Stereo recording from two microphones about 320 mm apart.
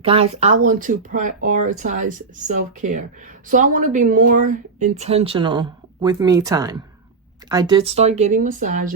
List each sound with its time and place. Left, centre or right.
0.0 s speech: centre